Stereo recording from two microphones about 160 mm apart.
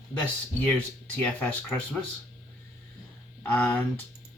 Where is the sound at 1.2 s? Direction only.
10° left (ahead or behind).